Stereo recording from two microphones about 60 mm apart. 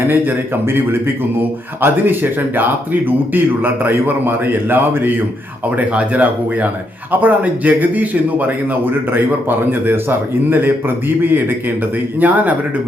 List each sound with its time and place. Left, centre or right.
0.1 s a man's voice: right